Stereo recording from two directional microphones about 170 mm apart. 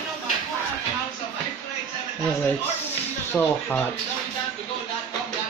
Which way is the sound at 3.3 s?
10° left (ahead or behind).